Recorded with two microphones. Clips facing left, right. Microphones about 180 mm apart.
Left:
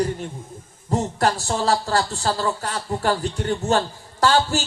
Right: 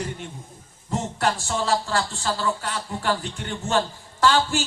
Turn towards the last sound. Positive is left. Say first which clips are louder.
# left 2 dB
turn(degrees=40)  # may be behind; listen again after turning